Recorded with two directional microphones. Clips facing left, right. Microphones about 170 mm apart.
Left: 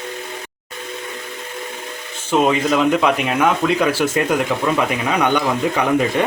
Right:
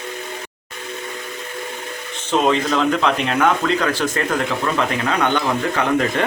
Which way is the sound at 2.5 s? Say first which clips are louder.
Left 2 dB; 10° left (ahead or behind).